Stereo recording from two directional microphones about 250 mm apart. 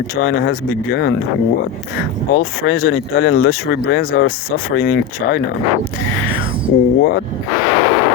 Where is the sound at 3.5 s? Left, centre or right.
Left.